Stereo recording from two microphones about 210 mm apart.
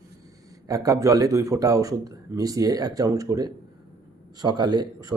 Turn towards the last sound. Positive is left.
turn(degrees=-20)  # may be behind; listen again after turning